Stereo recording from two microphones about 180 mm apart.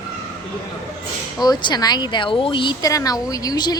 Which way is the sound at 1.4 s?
25° left (ahead or behind).